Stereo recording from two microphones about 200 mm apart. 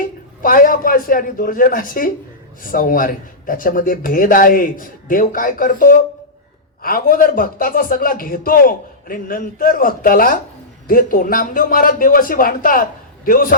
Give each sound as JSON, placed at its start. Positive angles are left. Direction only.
{"t": 0.4, "sound": "a man's voice", "side_deg": 45}